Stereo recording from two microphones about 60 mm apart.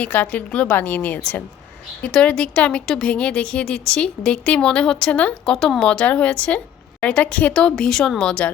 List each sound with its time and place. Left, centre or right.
0.0 s a woman's voice: left
2.0 s a woman's voice: centre